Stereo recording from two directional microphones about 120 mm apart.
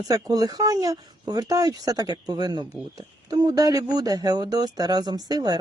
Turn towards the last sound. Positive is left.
turn(degrees=-35)  # may be behind; listen again after turning